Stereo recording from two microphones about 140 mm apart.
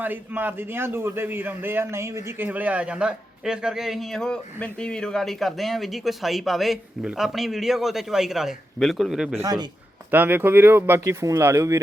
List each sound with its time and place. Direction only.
0.0 s a man's voice: 15° right (ahead or behind)
9.4 s a man's voice: 25° right (ahead or behind)
10.1 s speech: 15° right (ahead or behind)